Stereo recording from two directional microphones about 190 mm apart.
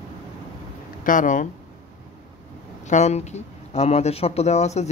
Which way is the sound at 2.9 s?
35° left (ahead or behind).